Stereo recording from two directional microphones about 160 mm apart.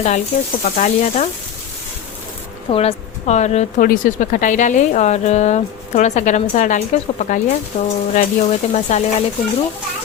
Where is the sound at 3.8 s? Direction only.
60° left (ahead or behind).